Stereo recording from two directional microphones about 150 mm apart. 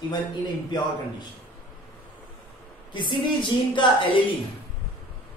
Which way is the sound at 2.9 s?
30° left (ahead or behind).